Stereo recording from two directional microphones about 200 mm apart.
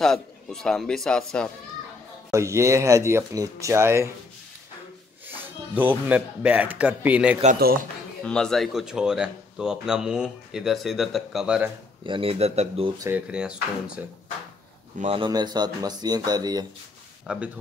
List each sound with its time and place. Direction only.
0.0 s speech: centre (ahead or behind)
2.3 s speech: 15° right (ahead or behind)
5.2 s speech: 10° right (ahead or behind)
7.5 s speech: 50° right (ahead or behind)
8.2 s speech: 5° left (ahead or behind)
12.0 s speech: 25° right (ahead or behind)
13.0 s speech: 5° right (ahead or behind)
15.0 s speech: 30° right (ahead or behind)
17.3 s speech: 5° right (ahead or behind)